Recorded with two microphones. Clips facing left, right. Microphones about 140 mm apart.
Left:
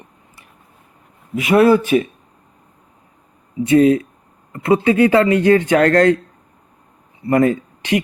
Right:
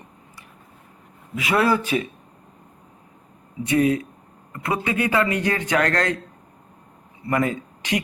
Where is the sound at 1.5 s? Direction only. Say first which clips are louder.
Left 8 dB; 25° left (ahead or behind).